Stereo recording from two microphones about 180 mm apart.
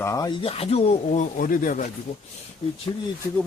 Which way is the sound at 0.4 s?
35° left (ahead or behind).